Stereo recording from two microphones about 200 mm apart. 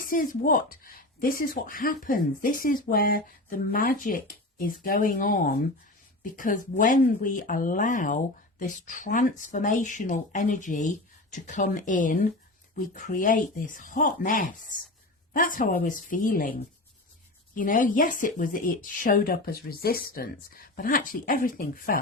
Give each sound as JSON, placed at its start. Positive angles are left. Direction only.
{"t": 0.1, "sound": "speech", "side_deg": 45}